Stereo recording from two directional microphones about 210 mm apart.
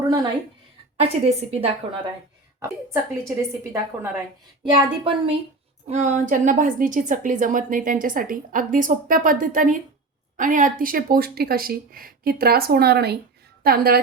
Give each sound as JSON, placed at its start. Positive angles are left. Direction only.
{"t": 0.0, "sound": "a woman's voice", "side_deg": -20}
{"t": 0.9, "sound": "a woman's voice", "side_deg": -30}
{"t": 2.9, "sound": "a woman's voice", "side_deg": -15}
{"t": 4.6, "sound": "a woman's voice", "side_deg": -25}